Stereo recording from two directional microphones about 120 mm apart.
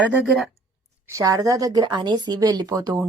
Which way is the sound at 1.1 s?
30° right (ahead or behind).